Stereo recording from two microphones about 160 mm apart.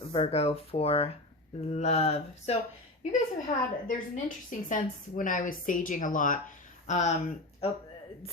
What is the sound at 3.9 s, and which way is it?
Speech, 55° left (ahead or behind).